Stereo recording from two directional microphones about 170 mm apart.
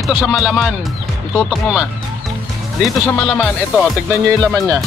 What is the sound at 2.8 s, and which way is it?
Speech, 5° left (ahead or behind).